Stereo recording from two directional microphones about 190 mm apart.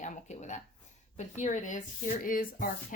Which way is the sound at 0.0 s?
40° left (ahead or behind).